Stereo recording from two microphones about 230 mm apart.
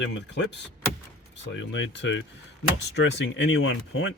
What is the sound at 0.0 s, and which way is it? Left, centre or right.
Speech, left.